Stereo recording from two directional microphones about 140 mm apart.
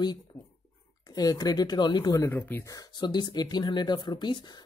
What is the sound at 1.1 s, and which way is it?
Speech, 25° left (ahead or behind).